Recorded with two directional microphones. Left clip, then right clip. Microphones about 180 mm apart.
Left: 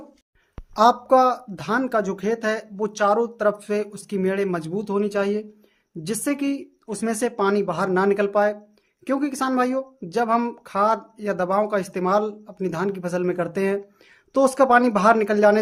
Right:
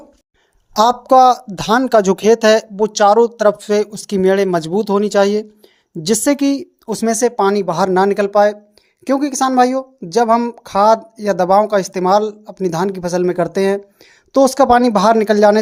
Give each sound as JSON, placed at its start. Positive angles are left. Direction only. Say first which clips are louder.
{"t": 0.7, "sound": "speech", "louder": "right 5 dB", "side_deg": -40}